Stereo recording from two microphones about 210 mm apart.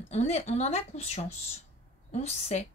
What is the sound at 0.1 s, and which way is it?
Speech, 30° left (ahead or behind).